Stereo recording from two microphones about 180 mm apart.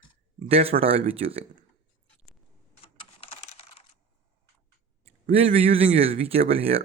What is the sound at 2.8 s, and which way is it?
Computer keyboard, 30° left (ahead or behind).